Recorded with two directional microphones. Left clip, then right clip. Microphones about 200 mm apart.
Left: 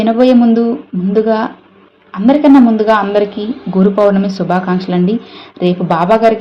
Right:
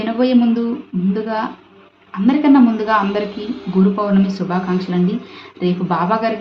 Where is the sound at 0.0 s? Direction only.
30° left (ahead or behind).